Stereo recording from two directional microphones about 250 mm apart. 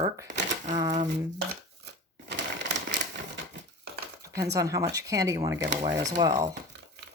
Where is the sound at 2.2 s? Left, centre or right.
Right.